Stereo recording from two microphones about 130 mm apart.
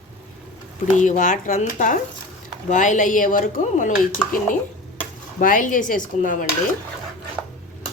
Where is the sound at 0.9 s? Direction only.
75° left (ahead or behind).